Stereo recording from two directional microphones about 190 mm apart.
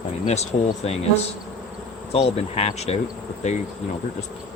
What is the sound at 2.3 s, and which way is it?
Insect, 35° left (ahead or behind).